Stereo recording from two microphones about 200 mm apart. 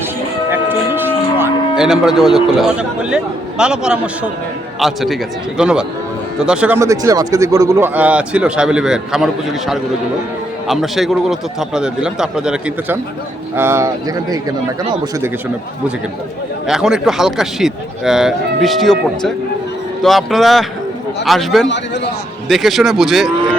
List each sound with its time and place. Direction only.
0.5 s livestock: 10° right (ahead or behind)
3.6 s a man's voice: 5° right (ahead or behind)
16.6 s speech: centre (ahead or behind)